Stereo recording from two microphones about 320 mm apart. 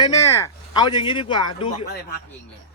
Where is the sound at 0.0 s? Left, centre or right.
Centre.